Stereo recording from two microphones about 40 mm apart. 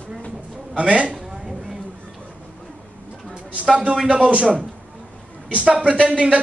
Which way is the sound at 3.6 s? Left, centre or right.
Right.